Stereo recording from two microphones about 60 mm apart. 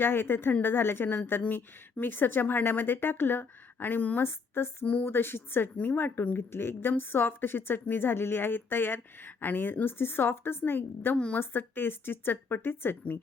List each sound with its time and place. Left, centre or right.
0.0 s speech: left
4.2 s speech: left